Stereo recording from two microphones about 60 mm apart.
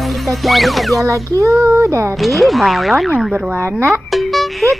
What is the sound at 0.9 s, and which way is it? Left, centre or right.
Speech, right.